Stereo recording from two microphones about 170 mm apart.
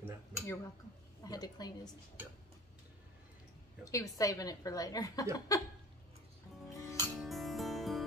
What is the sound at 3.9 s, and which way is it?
A woman's voice, 20° left (ahead or behind).